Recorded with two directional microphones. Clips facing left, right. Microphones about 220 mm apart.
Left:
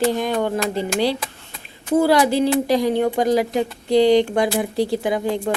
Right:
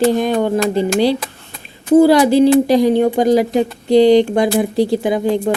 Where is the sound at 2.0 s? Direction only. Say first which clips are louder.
Right 6 dB; 35° right (ahead or behind).